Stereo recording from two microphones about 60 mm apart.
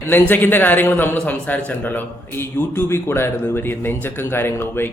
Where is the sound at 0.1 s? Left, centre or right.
Left.